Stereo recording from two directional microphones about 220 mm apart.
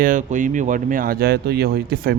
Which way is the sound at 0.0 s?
35° right (ahead or behind).